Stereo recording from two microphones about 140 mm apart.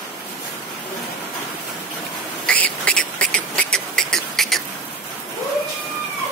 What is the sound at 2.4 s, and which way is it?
Beatboxing, 10° left (ahead or behind).